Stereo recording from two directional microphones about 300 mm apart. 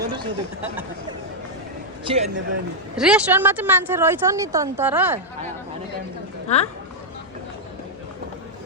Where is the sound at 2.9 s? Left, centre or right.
Centre.